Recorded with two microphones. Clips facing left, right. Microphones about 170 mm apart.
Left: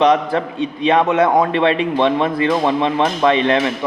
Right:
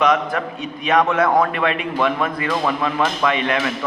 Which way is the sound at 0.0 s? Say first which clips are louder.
Left 4 dB; 30° left (ahead or behind).